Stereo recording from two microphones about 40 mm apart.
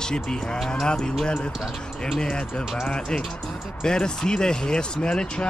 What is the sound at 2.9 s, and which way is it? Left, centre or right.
Speech, centre.